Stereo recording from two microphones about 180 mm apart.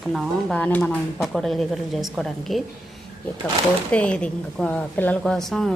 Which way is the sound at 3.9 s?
5° left (ahead or behind).